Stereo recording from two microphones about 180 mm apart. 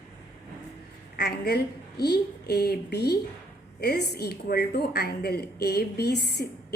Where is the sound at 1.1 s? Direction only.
65° left (ahead or behind).